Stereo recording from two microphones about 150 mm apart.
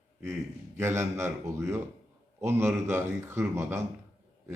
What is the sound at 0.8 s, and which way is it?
A man's voice, 15° right (ahead or behind).